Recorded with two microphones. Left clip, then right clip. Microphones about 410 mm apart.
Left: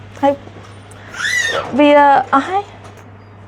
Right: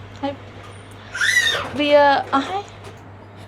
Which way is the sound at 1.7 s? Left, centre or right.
Left.